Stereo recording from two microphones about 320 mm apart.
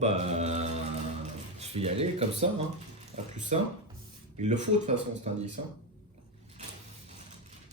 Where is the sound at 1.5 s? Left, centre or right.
Centre.